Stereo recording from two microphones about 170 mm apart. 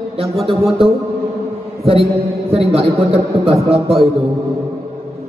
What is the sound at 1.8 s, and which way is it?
A man's voice, 35° right (ahead or behind).